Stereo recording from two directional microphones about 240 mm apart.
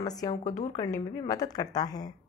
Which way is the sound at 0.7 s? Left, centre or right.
Centre.